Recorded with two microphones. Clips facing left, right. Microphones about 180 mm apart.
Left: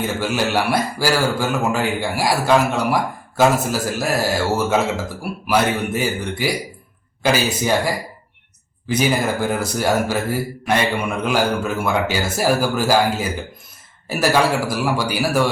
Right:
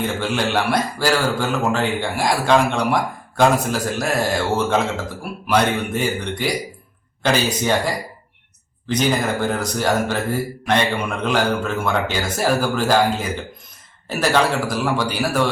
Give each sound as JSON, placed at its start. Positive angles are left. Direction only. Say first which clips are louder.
{"t": 0.0, "sound": "a man's voice", "louder": "left 1 dB", "side_deg": 5}